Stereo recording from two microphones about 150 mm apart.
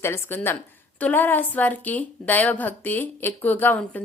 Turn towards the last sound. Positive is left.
turn(degrees=15)  # may be behind; listen again after turning